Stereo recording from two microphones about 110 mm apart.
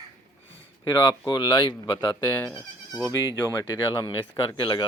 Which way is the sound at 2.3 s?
25° left (ahead or behind).